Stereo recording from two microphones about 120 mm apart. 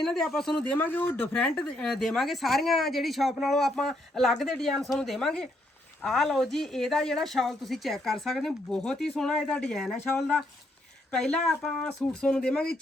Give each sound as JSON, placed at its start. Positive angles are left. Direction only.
{"t": 0.0, "sound": "speech", "side_deg": 5}
{"t": 10.0, "sound": "speech", "side_deg": 20}
{"t": 11.1, "sound": "speech", "side_deg": 5}